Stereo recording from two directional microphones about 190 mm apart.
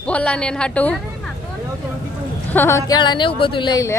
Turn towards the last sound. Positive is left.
turn(degrees=20)  # may be behind; listen again after turning